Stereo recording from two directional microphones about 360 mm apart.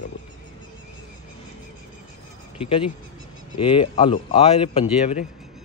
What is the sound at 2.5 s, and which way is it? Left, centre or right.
Speech, centre.